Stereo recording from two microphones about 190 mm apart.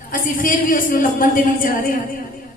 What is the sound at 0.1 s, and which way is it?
A woman's voice, 45° left (ahead or behind).